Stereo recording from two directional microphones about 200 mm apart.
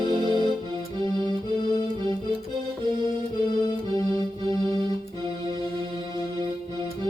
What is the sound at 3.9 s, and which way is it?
Music, 25° right (ahead or behind).